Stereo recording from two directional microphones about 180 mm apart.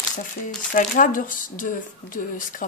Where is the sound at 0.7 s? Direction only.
45° left (ahead or behind).